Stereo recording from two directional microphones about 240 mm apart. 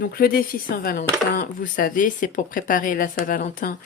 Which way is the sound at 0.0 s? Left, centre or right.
Left.